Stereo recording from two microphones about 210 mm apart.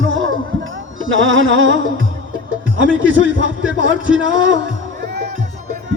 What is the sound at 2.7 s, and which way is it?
A man's voice, 65° right (ahead or behind).